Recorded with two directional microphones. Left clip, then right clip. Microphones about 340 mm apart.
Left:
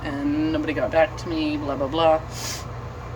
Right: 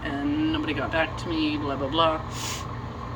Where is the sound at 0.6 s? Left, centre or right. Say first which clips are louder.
Left 6 dB; centre.